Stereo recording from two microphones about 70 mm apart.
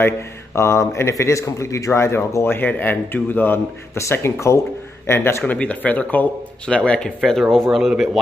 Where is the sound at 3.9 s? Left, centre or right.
Left.